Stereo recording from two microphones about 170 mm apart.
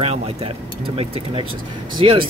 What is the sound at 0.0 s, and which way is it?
Speech, 35° right (ahead or behind).